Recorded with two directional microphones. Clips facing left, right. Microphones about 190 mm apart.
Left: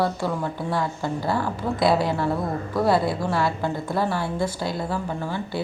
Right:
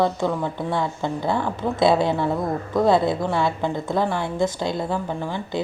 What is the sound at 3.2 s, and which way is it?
Speech, centre (ahead or behind).